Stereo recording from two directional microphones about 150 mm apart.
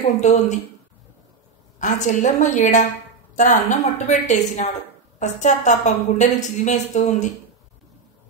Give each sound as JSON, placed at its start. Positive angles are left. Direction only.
{"t": 0.0, "sound": "a woman's voice", "side_deg": 50}
{"t": 1.8, "sound": "a woman's voice", "side_deg": 55}